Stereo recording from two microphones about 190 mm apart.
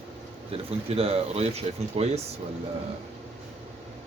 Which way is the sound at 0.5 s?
30° right (ahead or behind).